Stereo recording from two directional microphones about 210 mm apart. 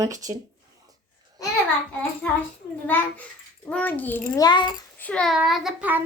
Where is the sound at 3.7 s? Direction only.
5° left (ahead or behind).